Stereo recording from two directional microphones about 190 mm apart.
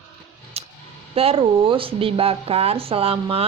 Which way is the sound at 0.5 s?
35° right (ahead or behind).